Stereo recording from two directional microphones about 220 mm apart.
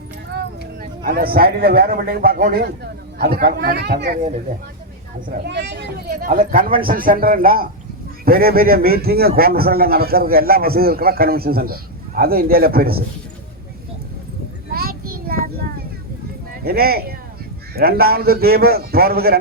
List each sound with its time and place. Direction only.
0.3 s speech: 45° right (ahead or behind)
5.5 s a man's voice: 50° right (ahead or behind)
14.7 s child singing: 45° right (ahead or behind)
16.6 s a man's voice: 45° right (ahead or behind)